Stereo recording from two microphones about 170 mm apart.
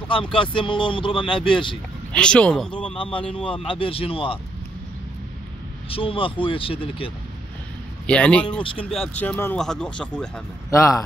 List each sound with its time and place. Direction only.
0.3 s speech: 30° left (ahead or behind)
2.1 s speech: 5° left (ahead or behind)
3.0 s speech: 30° left (ahead or behind)
5.9 s speech: 30° left (ahead or behind)
8.1 s speech: 5° left (ahead or behind)
10.7 s speech: 15° left (ahead or behind)